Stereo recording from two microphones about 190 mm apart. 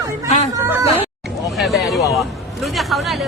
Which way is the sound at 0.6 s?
10° right (ahead or behind).